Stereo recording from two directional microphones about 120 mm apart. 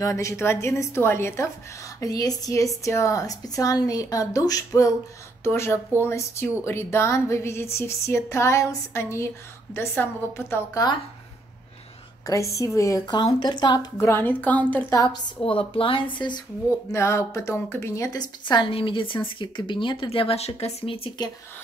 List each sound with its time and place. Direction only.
0.0 s speech: 25° left (ahead or behind)
5.4 s speech: 20° left (ahead or behind)
12.3 s a woman's voice: 25° left (ahead or behind)
13.9 s a woman's voice: 20° left (ahead or behind)
15.4 s speech: 50° left (ahead or behind)
16.9 s a woman's voice: 25° left (ahead or behind); by 21.1 s 50° left (ahead or behind)